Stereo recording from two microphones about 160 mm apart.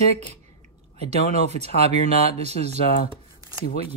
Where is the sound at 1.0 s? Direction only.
45° right (ahead or behind).